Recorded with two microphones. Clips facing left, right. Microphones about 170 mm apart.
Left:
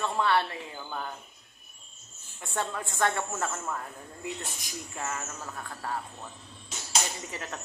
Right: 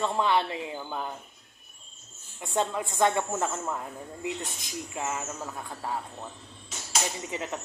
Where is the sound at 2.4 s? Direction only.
15° right (ahead or behind).